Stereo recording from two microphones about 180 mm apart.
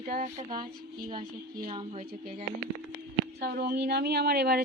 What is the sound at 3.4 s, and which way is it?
Speech, 60° right (ahead or behind).